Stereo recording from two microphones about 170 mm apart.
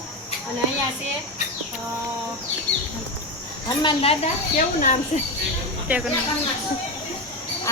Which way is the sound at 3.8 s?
30° left (ahead or behind).